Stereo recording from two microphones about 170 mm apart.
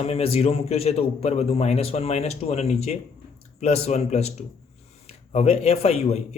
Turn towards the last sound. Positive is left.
turn(degrees=40)  # may be behind; listen again after turning